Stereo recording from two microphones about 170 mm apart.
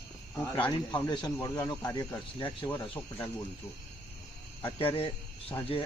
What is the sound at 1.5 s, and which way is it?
Speech, 10° left (ahead or behind).